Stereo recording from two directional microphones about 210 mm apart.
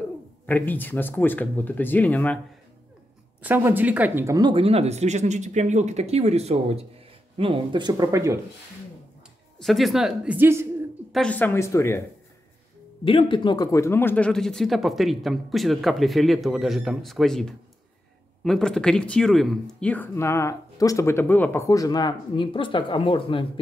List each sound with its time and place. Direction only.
0.5 s speech: 10° left (ahead or behind)
3.4 s speech: 10° right (ahead or behind)
9.6 s speech: centre (ahead or behind)
11.1 s speech: 5° left (ahead or behind)
13.0 s speech: 25° left (ahead or behind)